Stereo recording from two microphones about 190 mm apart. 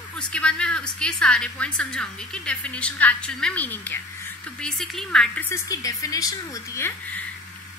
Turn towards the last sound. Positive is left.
turn(degrees=15)  # may be behind; listen again after turning